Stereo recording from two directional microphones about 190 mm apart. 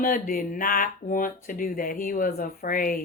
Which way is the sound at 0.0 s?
45° left (ahead or behind).